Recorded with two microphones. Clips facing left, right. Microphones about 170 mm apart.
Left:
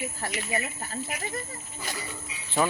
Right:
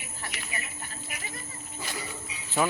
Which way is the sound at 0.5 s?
40° left (ahead or behind).